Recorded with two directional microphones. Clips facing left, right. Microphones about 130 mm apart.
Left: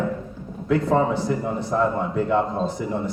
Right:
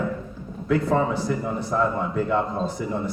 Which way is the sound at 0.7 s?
25° left (ahead or behind).